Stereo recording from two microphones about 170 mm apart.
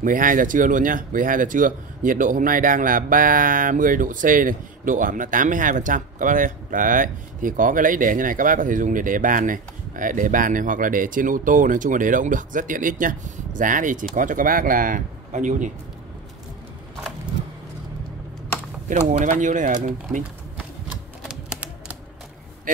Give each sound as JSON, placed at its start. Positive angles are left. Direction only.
{"t": 0.0, "sound": "speech", "side_deg": -55}
{"t": 18.9, "sound": "speech", "side_deg": -50}
{"t": 21.2, "sound": "typing", "side_deg": -5}